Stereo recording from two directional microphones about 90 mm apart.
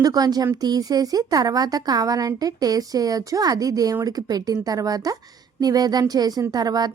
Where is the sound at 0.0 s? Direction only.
45° right (ahead or behind).